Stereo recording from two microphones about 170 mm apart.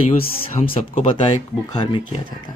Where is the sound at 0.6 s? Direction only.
40° left (ahead or behind).